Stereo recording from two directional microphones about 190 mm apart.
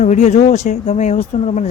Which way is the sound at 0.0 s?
40° left (ahead or behind).